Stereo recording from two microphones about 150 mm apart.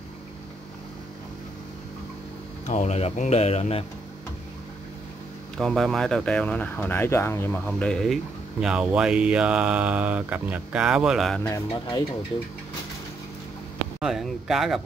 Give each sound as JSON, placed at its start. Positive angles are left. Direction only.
{"t": 2.7, "sound": "speech", "side_deg": 50}
{"t": 5.6, "sound": "speech", "side_deg": 5}
{"t": 11.4, "sound": "speech", "side_deg": 20}
{"t": 13.9, "sound": "speech", "side_deg": -5}